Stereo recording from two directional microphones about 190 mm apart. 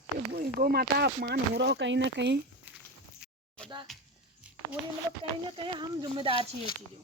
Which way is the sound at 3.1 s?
5° right (ahead or behind).